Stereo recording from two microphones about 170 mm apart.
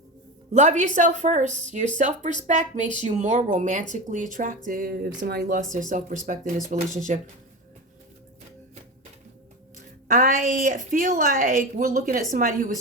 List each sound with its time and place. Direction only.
0.5 s speech: 45° right (ahead or behind); by 5.5 s 65° right (ahead or behind)
5.7 s speech: 50° right (ahead or behind)
10.1 s a woman's voice: 50° right (ahead or behind)